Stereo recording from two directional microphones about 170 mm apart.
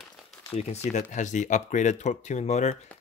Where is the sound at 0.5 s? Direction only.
40° left (ahead or behind).